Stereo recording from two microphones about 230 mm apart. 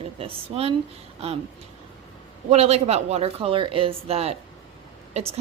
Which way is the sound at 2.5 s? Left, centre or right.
Right.